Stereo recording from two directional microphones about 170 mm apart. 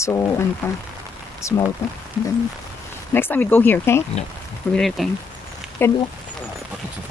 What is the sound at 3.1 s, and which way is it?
Speech, 10° left (ahead or behind).